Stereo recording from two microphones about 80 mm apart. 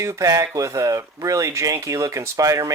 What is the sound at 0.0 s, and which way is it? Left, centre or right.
Speech, right.